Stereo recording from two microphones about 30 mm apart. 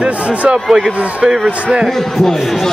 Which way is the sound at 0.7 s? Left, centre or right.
Centre.